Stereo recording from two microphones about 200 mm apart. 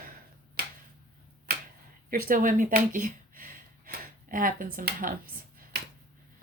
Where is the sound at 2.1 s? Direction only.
45° right (ahead or behind).